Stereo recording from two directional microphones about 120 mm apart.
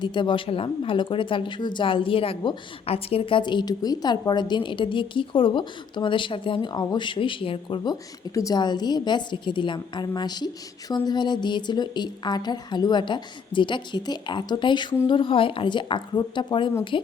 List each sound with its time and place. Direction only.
0.0 s speech: 40° left (ahead or behind)
7.9 s a woman's voice: 30° left (ahead or behind)